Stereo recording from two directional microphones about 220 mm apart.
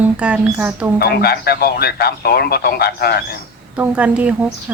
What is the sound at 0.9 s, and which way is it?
A man's voice, 45° left (ahead or behind).